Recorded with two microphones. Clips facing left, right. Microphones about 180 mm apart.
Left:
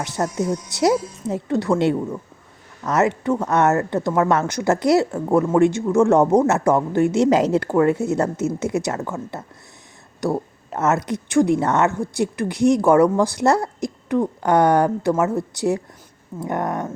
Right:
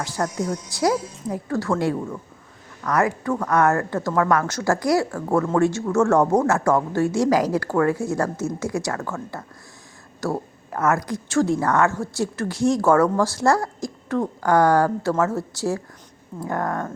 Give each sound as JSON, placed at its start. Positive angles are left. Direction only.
{"t": 0.0, "sound": "speech", "side_deg": 20}